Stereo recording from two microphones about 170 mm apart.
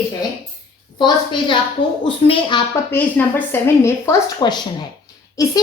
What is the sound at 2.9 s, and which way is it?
A woman's voice, 10° left (ahead or behind).